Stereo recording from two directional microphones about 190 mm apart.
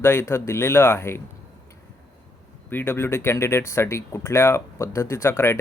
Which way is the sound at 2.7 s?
10° left (ahead or behind).